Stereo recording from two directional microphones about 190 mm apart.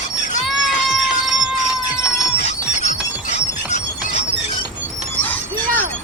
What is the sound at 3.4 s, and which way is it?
Music, 35° left (ahead or behind).